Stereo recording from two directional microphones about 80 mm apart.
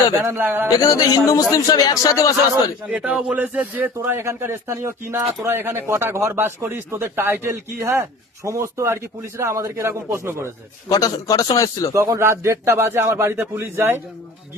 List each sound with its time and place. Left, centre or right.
0.3 s a man's voice: right
0.7 s speech: left
2.9 s a sound: centre
4.0 s speech: right
10.8 s speech: left
11.9 s speech: right